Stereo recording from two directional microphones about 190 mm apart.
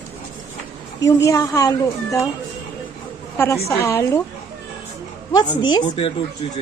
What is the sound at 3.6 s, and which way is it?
Speech, 15° left (ahead or behind).